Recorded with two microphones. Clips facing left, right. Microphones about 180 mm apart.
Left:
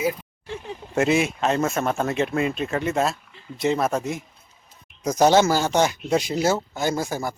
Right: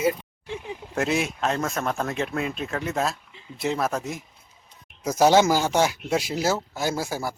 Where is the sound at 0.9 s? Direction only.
Centre (ahead or behind).